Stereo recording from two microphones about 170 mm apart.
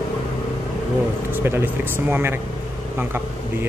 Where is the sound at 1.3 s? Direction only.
10° right (ahead or behind).